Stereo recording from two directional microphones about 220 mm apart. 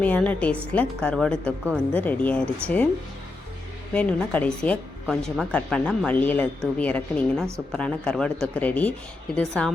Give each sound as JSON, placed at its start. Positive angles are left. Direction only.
{"t": 0.0, "sound": "a woman's voice", "side_deg": 5}
{"t": 3.9, "sound": "a woman's voice", "side_deg": 5}